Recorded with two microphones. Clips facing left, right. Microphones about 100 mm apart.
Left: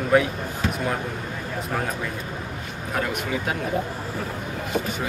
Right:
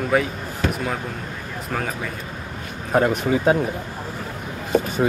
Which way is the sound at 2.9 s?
35° right (ahead or behind).